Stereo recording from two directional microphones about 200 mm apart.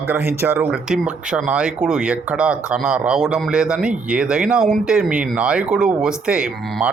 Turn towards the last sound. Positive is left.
turn(degrees=-5)  # may be behind; listen again after turning